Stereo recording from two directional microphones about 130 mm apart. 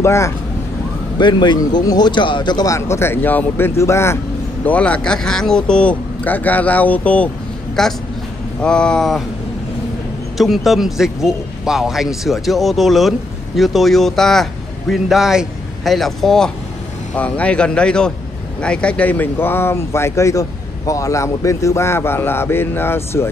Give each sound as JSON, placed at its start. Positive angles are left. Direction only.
{"t": 0.0, "sound": "speech", "side_deg": 20}
{"t": 1.2, "sound": "speech", "side_deg": 35}
{"t": 4.6, "sound": "speech", "side_deg": 10}
{"t": 10.3, "sound": "speech", "side_deg": 0}